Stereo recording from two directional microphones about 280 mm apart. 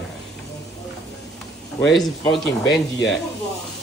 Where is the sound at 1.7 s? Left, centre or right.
Centre.